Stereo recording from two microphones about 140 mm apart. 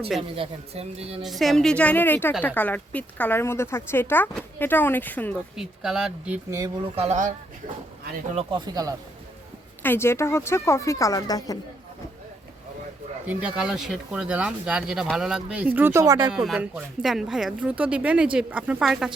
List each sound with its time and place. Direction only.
0.2 s speech: 45° right (ahead or behind)
1.2 s a woman's voice: centre (ahead or behind)
5.5 s speech: 5° right (ahead or behind)
6.9 s speech: 50° right (ahead or behind)
8.4 s speech: 35° right (ahead or behind)
9.8 s speech: 15° left (ahead or behind)
13.2 s speech: 5° right (ahead or behind); by 16.3 s 25° right (ahead or behind)
16.3 s speech: 5° right (ahead or behind)